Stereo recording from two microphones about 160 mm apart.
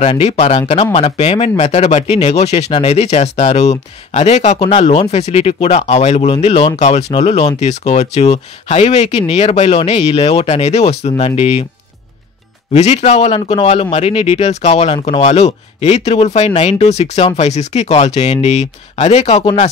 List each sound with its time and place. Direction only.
0.0 s speech: 40° left (ahead or behind)
12.7 s speech: 45° left (ahead or behind)